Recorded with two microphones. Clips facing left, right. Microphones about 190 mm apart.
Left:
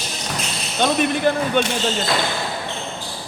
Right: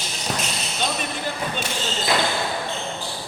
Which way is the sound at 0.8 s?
65° left (ahead or behind).